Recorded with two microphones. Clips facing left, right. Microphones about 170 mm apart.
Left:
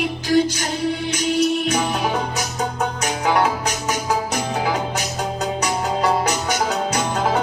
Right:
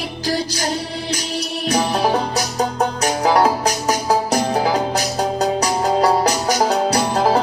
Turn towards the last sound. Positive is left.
turn(degrees=-35)  # may be behind; listen again after turning